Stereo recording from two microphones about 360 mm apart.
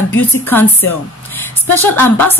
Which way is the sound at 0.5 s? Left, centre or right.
Centre.